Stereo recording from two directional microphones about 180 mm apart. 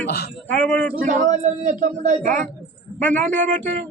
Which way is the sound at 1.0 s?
45° right (ahead or behind).